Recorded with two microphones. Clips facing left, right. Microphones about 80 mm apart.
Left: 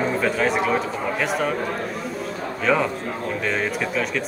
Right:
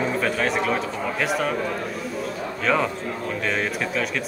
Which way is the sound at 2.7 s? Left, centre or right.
Centre.